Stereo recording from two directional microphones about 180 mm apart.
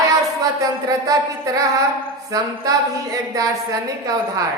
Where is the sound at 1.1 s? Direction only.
20° right (ahead or behind).